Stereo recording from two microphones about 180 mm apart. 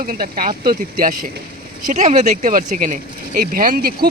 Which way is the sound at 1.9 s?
40° right (ahead or behind).